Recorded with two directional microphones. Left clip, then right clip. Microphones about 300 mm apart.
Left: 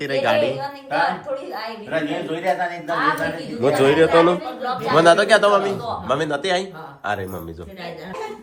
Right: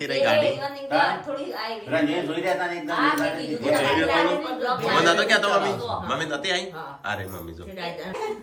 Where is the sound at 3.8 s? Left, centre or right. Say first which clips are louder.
Left 8 dB; centre.